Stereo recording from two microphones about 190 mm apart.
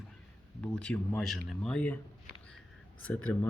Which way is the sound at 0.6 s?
5° left (ahead or behind).